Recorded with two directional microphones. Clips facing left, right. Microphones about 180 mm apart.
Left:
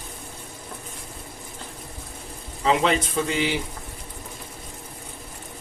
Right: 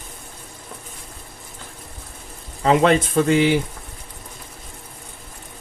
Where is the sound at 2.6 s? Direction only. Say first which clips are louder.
Right 5 dB; 50° right (ahead or behind).